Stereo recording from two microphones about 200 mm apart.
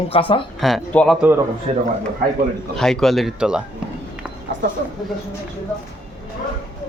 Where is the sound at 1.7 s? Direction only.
30° right (ahead or behind).